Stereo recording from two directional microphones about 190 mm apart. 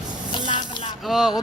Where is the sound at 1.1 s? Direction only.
5° right (ahead or behind).